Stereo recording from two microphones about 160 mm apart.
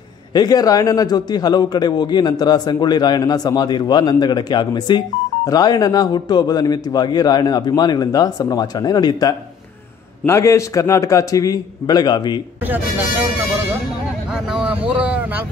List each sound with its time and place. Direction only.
0.3 s a man's voice: 25° left (ahead or behind)
14.5 s vehicle: 5° right (ahead or behind)